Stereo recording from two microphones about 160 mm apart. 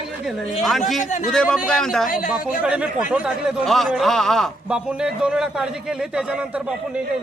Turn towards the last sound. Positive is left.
turn(degrees=-5)  # may be behind; listen again after turning